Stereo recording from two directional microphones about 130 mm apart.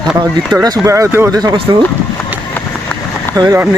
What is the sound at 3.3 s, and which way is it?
Speech, 25° right (ahead or behind).